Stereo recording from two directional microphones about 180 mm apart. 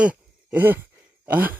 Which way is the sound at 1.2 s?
10° right (ahead or behind).